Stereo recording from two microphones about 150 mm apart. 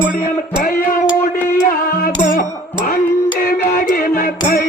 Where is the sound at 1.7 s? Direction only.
70° left (ahead or behind).